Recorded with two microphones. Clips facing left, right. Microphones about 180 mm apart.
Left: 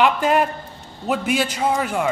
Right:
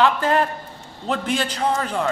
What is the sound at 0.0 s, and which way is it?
A man's voice, 15° left (ahead or behind).